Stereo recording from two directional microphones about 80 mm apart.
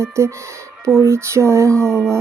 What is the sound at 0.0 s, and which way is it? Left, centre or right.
Speech, right.